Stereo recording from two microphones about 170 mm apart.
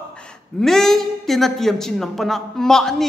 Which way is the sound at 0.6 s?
Centre (ahead or behind).